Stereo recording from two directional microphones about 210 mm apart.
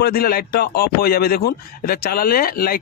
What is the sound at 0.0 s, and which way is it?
Speech, 45° left (ahead or behind).